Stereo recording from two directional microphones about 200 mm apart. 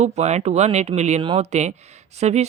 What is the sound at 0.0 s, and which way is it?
Speech, 35° right (ahead or behind).